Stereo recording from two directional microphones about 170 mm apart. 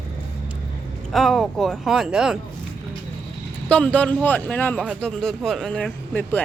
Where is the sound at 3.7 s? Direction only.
5° left (ahead or behind).